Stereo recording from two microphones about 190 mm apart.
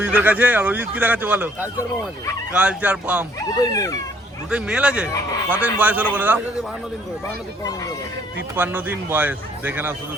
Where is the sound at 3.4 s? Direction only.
20° left (ahead or behind).